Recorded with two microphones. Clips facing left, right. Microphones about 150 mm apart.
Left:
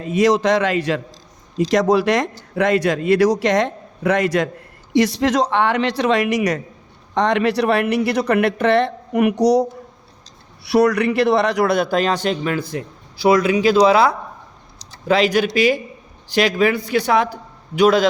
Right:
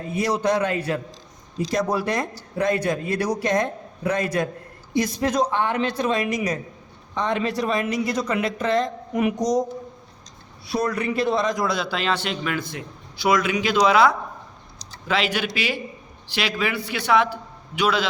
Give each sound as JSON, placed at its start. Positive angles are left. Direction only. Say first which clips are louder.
{"t": 0.0, "sound": "a man's voice", "louder": "left 7 dB", "side_deg": 90}